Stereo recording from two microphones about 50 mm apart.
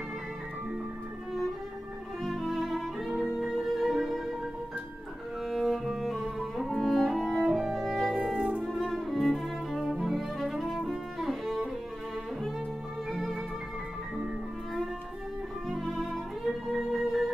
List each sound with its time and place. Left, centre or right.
2.2 s music: centre
5.5 s cello: centre
6.1 s music: centre
8.4 s music: right
8.6 s music: centre
9.3 s cello: centre
9.9 s music: centre
13.1 s music: centre
15.9 s music: centre